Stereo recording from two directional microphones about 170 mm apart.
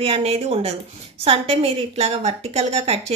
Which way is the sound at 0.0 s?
35° right (ahead or behind).